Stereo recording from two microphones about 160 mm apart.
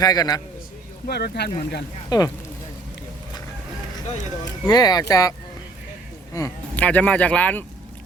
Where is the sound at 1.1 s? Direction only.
90° left.